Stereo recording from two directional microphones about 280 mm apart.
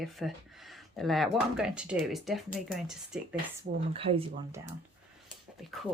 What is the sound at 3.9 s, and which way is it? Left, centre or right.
Speech, centre.